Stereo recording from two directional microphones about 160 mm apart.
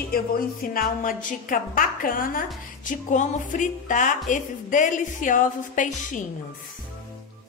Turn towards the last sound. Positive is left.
turn(degrees=55)  # may be behind; listen again after turning